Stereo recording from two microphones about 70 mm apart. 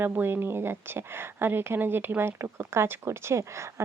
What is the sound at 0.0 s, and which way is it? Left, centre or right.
Speech, right.